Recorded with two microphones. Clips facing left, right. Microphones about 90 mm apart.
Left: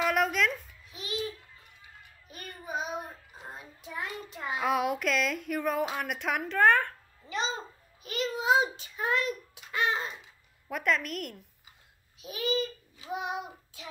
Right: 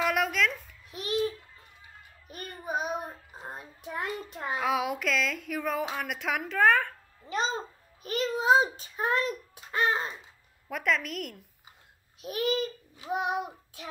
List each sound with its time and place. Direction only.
0.0 s a sound: centre (ahead or behind)
0.9 s babbling: 50° right (ahead or behind)
2.3 s child singing: 45° right (ahead or behind)
3.3 s a sound: 40° right (ahead or behind)
4.6 s speech: centre (ahead or behind)
7.2 s babbling: 45° right (ahead or behind)
10.7 s speech: centre (ahead or behind)
12.2 s child singing: 55° right (ahead or behind)